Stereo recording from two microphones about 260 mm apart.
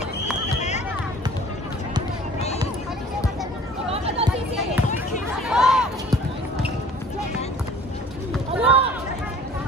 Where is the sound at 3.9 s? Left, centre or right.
Right.